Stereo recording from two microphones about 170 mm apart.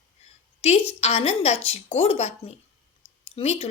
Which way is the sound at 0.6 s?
35° left (ahead or behind).